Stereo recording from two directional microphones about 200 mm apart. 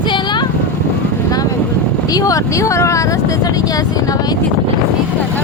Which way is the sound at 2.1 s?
20° left (ahead or behind).